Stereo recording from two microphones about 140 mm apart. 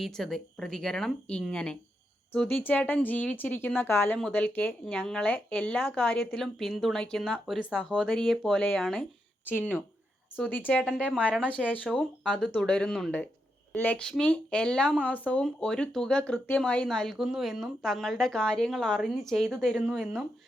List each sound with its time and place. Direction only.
0.0 s speech: centre (ahead or behind)
10.3 s speech: 10° left (ahead or behind)